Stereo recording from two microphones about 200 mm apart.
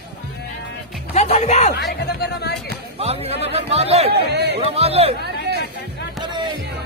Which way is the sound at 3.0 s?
30° right (ahead or behind).